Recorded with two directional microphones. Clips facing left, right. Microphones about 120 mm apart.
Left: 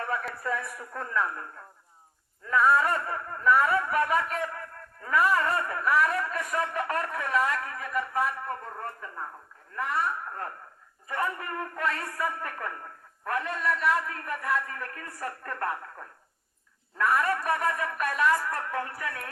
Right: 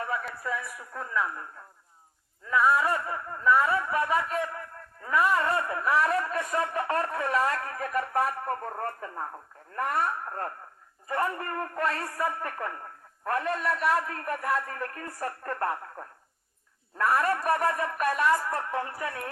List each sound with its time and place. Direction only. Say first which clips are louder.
0.0 s a man's voice: left 1 dB; 10° right (ahead or behind)
2.5 s speech: left 1 dB; 10° right (ahead or behind); by 10.1 s 50° right (ahead or behind)
11.1 s speech: right 2 dB; 35° right (ahead or behind)